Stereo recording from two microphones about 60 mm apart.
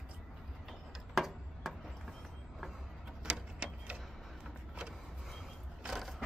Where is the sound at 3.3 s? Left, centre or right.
Centre.